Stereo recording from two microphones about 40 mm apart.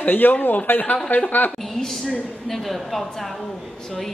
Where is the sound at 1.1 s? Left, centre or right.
Left.